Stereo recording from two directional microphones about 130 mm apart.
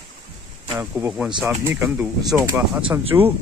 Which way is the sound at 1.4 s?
15° right (ahead or behind).